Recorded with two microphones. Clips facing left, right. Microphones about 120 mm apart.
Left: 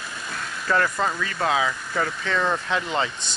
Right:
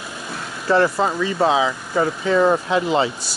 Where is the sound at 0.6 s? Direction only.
30° right (ahead or behind).